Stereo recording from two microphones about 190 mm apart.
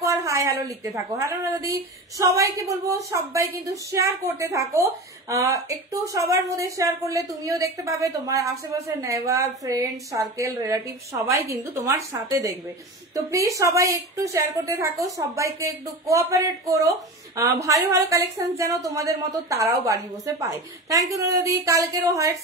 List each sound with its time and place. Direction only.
0.0 s a woman's voice: 15° right (ahead or behind)